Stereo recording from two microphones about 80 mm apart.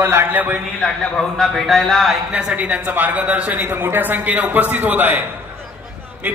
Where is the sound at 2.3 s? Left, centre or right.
Centre.